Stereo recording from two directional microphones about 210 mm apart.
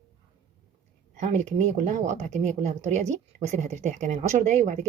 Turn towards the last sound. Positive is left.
turn(degrees=-35)  # may be behind; listen again after turning